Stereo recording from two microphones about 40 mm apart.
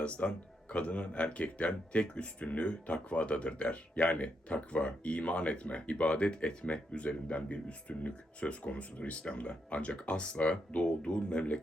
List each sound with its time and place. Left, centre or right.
0.0 s speech: left